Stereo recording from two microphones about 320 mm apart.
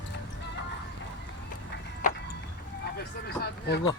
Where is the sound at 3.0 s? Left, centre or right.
Left.